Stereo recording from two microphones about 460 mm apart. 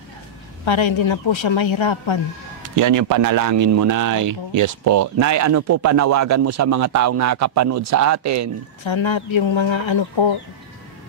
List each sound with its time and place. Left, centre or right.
0.7 s speech: left
2.7 s speech: right
8.8 s speech: left